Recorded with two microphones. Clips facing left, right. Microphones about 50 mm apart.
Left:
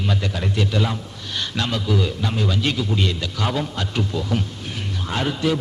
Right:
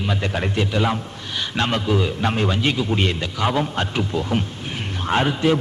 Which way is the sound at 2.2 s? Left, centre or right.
Right.